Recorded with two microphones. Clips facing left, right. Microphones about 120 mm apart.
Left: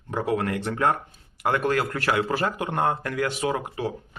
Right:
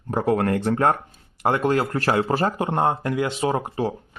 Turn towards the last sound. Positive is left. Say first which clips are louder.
# right 3 dB
turn(degrees=-35)  # may be behind; listen again after turning